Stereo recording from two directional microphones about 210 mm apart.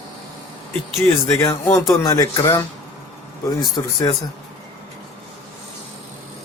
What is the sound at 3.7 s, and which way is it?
Speech, 20° left (ahead or behind).